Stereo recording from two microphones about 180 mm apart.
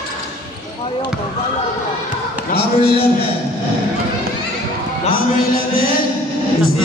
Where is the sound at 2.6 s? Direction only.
30° left (ahead or behind).